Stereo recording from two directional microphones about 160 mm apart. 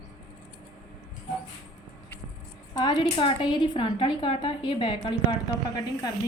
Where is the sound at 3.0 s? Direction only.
35° left (ahead or behind).